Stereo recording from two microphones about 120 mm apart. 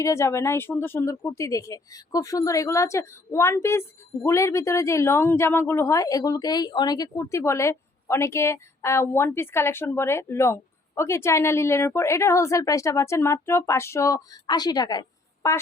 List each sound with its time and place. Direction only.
0.0 s a woman's voice: 25° left (ahead or behind)